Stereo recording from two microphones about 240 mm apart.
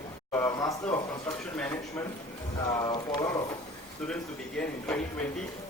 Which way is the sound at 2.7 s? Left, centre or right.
Centre.